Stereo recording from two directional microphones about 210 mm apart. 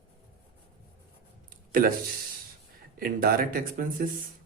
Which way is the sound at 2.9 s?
45° right (ahead or behind).